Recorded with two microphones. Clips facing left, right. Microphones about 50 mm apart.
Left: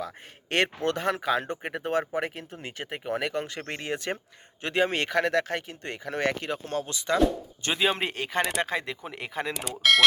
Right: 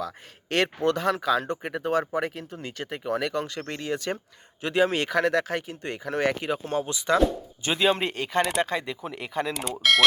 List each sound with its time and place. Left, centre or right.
0.5 s speech: centre
1.1 s speech: left
3.9 s speech: centre
4.6 s speech: centre
7.2 s speech: centre